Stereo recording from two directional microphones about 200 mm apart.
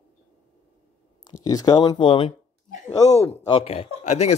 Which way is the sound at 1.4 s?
20° left (ahead or behind).